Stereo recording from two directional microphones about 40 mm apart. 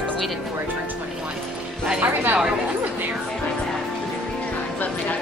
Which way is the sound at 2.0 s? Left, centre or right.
Right.